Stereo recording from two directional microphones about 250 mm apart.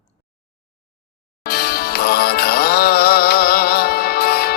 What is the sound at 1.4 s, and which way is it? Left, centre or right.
Music, left.